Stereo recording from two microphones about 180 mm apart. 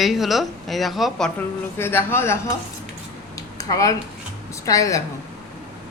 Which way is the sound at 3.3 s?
20° left (ahead or behind).